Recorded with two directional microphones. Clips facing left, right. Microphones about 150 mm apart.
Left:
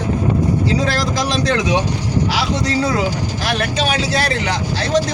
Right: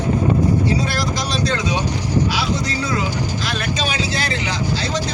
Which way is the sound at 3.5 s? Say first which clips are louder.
Left 4 dB; 65° left (ahead or behind).